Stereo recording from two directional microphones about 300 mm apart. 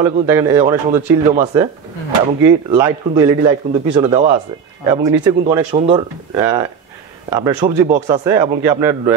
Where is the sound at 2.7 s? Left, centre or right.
Centre.